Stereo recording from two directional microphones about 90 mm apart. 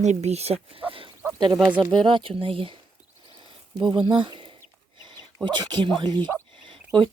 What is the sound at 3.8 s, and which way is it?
Speech, 65° right (ahead or behind).